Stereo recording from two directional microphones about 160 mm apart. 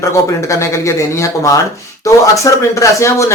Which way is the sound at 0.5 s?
20° left (ahead or behind).